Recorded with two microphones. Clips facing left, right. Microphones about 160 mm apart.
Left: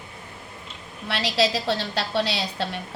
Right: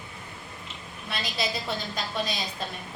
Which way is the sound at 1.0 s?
80° left.